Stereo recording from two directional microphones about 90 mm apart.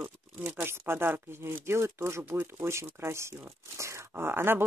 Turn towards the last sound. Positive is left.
turn(degrees=-25)  # may be behind; listen again after turning